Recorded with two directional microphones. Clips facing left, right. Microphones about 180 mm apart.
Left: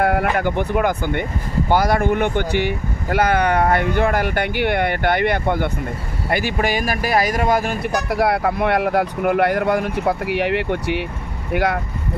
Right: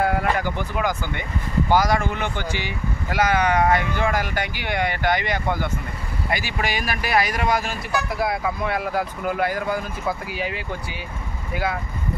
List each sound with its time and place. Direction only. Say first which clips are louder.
0.0 s speech: left 4 dB; 60° left (ahead or behind)